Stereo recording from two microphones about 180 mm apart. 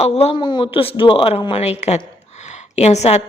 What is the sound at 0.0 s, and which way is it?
A woman's voice, 35° left (ahead or behind).